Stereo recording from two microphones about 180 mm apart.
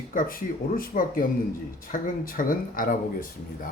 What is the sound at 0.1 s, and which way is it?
Speech, 50° left (ahead or behind).